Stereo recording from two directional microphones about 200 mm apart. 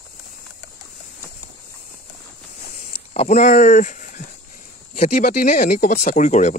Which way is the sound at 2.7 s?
35° left (ahead or behind).